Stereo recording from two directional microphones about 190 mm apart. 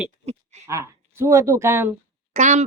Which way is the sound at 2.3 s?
40° right (ahead or behind).